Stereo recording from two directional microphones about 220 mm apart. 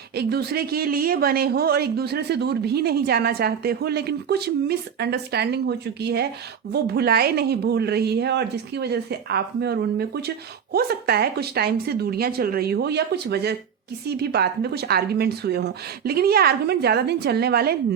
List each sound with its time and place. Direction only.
0.2 s a woman's voice: 45° right (ahead or behind)